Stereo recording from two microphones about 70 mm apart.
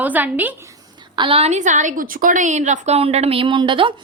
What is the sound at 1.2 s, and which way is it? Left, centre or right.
Speech, right.